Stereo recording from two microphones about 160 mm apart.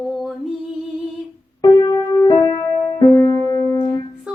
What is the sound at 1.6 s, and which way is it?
Music, 25° left (ahead or behind).